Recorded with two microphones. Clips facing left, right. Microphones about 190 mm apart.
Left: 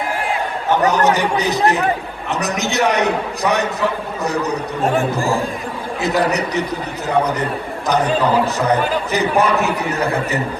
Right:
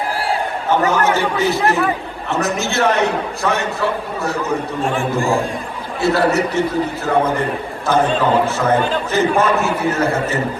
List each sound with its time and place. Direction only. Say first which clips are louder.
0.7 s a man's voice: left 1 dB; 20° left (ahead or behind)
4.8 s a man's voice: left 6 dB; 40° left (ahead or behind)
6.0 s a man's voice: right 3 dB; 20° left (ahead or behind)
8.5 s a man's voice: right 1 dB; 15° left (ahead or behind)